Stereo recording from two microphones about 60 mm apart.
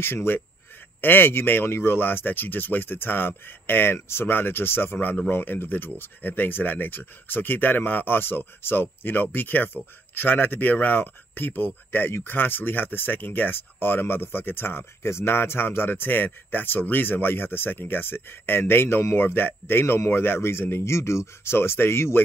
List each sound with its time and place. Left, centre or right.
0.0 s speech: left